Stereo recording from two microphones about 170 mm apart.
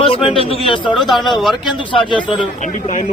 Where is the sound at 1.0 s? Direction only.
Centre (ahead or behind).